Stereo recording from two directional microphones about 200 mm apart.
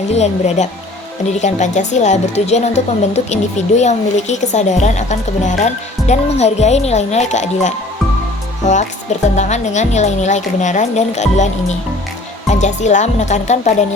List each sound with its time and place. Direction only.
0.1 s speech: 35° left (ahead or behind)
9.2 s speech: 35° left (ahead or behind)